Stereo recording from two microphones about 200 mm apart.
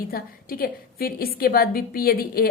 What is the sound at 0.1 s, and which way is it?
A woman's voice, 45° left (ahead or behind).